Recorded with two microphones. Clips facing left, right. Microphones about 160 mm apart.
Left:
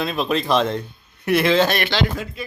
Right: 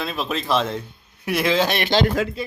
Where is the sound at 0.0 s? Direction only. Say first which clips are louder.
Left 4 dB; centre (ahead or behind).